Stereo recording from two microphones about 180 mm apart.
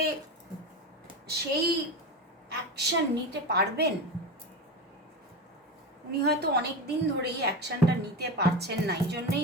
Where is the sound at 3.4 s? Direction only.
65° right (ahead or behind).